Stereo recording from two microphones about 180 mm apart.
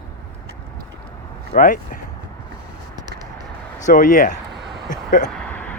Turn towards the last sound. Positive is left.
turn(degrees=5)  # may be behind; listen again after turning